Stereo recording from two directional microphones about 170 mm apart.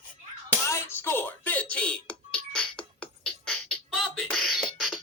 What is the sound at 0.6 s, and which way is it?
Music, 15° left (ahead or behind).